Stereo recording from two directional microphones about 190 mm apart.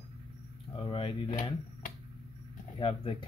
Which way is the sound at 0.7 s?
30° left (ahead or behind).